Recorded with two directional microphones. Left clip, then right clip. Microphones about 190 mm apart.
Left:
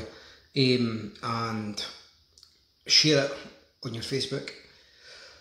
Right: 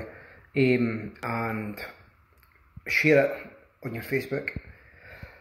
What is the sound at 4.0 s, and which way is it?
Speech, 15° left (ahead or behind).